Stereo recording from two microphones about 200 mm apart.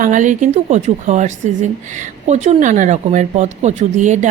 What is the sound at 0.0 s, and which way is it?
Speech, 40° right (ahead or behind).